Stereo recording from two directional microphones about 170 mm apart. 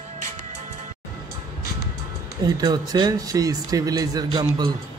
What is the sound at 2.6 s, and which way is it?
Speech, 25° right (ahead or behind).